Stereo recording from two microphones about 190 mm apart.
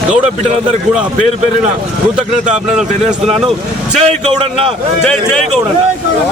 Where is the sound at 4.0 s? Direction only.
35° right (ahead or behind).